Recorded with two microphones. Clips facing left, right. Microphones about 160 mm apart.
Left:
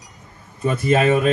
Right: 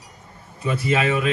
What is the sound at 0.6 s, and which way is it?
Speech, 45° left (ahead or behind).